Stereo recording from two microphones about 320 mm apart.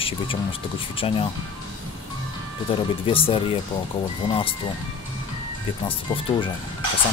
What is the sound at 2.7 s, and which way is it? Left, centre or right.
Speech, centre.